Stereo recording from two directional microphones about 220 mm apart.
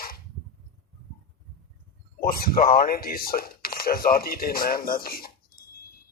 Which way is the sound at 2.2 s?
40° left (ahead or behind).